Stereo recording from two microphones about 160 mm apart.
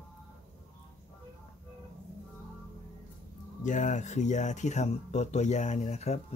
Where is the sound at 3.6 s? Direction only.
50° left (ahead or behind).